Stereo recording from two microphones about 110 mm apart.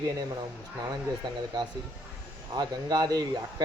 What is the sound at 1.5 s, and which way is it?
Speech, 40° right (ahead or behind).